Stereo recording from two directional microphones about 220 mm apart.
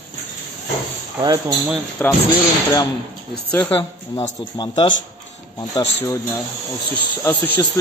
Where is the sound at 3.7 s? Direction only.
25° left (ahead or behind).